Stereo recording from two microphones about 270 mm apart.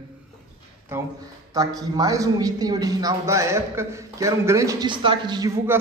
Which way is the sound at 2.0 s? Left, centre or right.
Centre.